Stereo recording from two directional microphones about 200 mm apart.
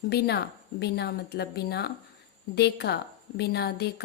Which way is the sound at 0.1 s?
55° left (ahead or behind).